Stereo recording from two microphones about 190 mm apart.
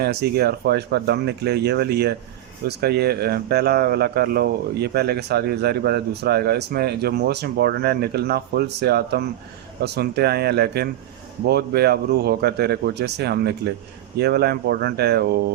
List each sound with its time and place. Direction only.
0.0 s a man's voice: 55° right (ahead or behind)